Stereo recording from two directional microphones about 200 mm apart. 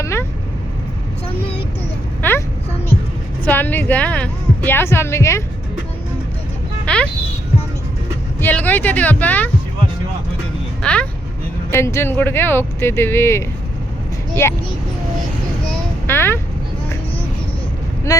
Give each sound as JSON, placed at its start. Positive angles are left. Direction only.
{"t": 0.0, "sound": "vehicle", "side_deg": 15}
{"t": 2.2, "sound": "vehicle", "side_deg": 10}
{"t": 3.4, "sound": "a woman's voice", "side_deg": 10}
{"t": 6.8, "sound": "a sound", "side_deg": 5}
{"t": 8.4, "sound": "speech", "side_deg": 10}
{"t": 10.8, "sound": "speech", "side_deg": 5}
{"t": 14.4, "sound": "speech", "side_deg": 10}
{"t": 15.7, "sound": "a sound", "side_deg": 10}
{"t": 18.1, "sound": "speech", "side_deg": 15}